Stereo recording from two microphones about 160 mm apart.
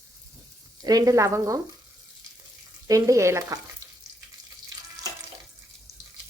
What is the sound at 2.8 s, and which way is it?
Speech, 20° right (ahead or behind).